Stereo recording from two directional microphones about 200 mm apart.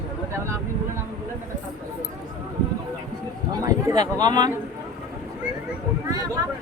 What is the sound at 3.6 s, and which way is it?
Speech, 20° right (ahead or behind).